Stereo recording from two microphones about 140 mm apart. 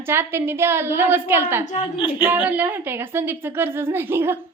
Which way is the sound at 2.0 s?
40° left (ahead or behind).